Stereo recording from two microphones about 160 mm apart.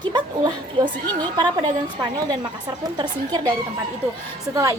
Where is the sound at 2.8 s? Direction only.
25° right (ahead or behind).